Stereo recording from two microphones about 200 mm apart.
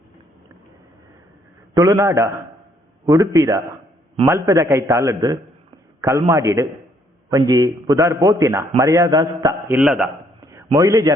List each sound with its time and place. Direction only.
1.7 s a man's voice: 15° right (ahead or behind)
10.5 s speech: 15° right (ahead or behind)